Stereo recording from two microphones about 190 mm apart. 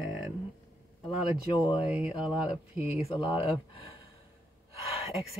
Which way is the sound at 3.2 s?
25° left (ahead or behind).